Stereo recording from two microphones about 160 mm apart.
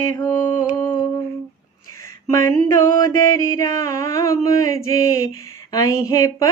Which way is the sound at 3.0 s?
20° left (ahead or behind).